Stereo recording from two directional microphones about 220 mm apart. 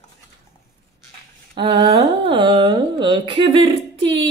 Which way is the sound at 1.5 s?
20° right (ahead or behind).